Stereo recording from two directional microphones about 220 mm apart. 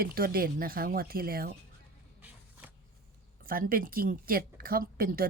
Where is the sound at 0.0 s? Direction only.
40° right (ahead or behind).